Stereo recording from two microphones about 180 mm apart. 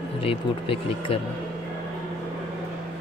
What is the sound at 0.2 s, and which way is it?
Speech, 30° left (ahead or behind).